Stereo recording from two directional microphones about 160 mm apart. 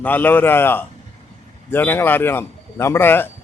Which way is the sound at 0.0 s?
10° left (ahead or behind).